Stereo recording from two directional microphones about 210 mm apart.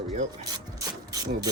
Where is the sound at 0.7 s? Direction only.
15° right (ahead or behind).